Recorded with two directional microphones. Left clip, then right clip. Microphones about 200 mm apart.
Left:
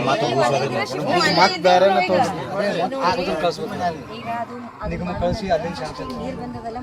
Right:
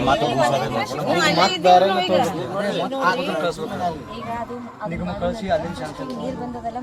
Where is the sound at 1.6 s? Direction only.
20° right (ahead or behind).